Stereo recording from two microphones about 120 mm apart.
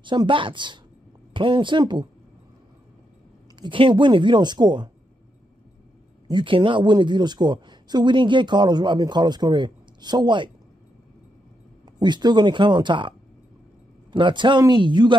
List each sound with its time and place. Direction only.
0.0 s a woman's voice: 40° right (ahead or behind)
3.5 s speech: 40° right (ahead or behind)
6.2 s speech: 40° right (ahead or behind)
12.0 s speech: 35° right (ahead or behind)
14.1 s a woman's voice: 40° right (ahead or behind)